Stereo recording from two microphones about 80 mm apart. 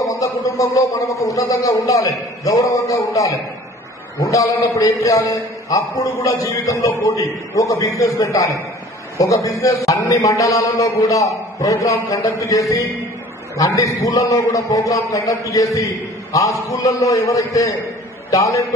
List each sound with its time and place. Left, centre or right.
0.2 s a man's voice: left